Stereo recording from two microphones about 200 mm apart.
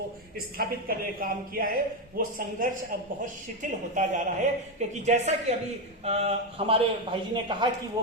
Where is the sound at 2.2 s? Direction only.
45° right (ahead or behind).